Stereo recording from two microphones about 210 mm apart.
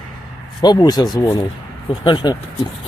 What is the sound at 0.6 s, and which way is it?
Speech, 20° left (ahead or behind).